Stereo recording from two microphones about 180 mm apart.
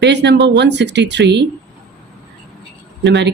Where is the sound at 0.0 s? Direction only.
70° right (ahead or behind).